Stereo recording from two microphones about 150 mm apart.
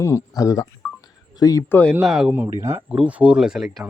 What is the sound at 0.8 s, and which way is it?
Telephone dialing, centre (ahead or behind).